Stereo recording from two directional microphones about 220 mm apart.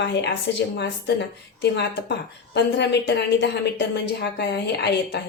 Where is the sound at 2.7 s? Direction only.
50° left (ahead or behind).